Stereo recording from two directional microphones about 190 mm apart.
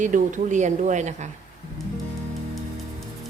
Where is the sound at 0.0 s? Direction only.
40° right (ahead or behind).